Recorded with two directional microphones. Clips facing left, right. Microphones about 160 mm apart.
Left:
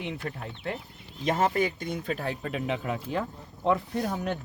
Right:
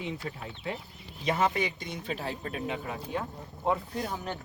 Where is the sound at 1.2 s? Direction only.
50° left (ahead or behind).